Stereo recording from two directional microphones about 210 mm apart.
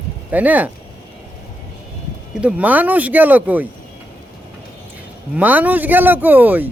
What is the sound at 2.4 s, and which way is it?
Speech, 5° right (ahead or behind).